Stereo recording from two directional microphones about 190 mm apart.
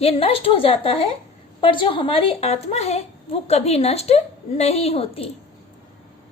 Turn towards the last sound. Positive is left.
turn(degrees=30)  # may be behind; listen again after turning